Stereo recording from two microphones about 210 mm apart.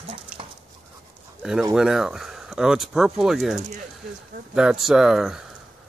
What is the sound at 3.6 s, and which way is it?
Speech, 35° right (ahead or behind).